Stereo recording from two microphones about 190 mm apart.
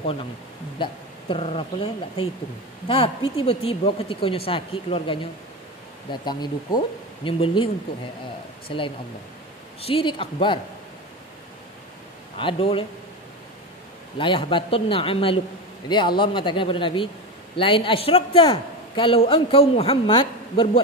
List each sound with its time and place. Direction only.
0.8 s a man's voice: 25° left (ahead or behind)
6.2 s a man's voice: 20° left (ahead or behind)
12.4 s a man's voice: 30° left (ahead or behind)
14.1 s a man's voice: 25° left (ahead or behind)